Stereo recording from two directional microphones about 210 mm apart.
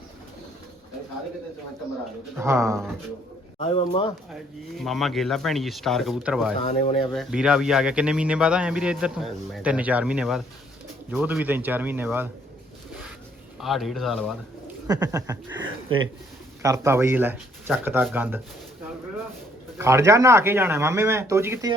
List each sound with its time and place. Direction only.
2.4 s speech: 15° right (ahead or behind)
3.6 s speech: 25° left (ahead or behind)
4.8 s speech: centre (ahead or behind)
6.7 s speech: 30° left (ahead or behind)
7.1 s speech: centre (ahead or behind)
13.6 s speech: centre (ahead or behind)
14.8 s speech: 15° right (ahead or behind)
16.6 s speech: 15° right (ahead or behind)
19.8 s speech: 15° right (ahead or behind)